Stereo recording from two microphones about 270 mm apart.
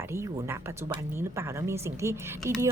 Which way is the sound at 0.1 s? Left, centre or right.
Centre.